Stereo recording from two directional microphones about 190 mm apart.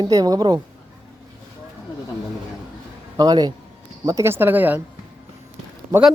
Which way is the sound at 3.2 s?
20° right (ahead or behind).